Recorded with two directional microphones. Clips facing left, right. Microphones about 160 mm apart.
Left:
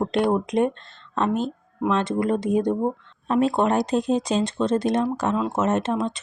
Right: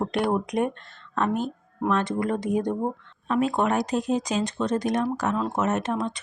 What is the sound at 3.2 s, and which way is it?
Speech, 35° left (ahead or behind).